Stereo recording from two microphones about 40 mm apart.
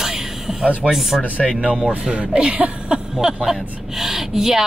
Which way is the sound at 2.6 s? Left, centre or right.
Centre.